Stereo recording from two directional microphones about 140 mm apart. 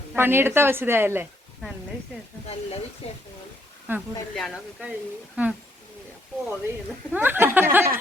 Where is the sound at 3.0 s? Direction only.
40° left (ahead or behind).